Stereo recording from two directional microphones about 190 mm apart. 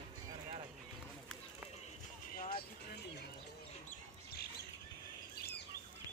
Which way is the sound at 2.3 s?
50° left (ahead or behind).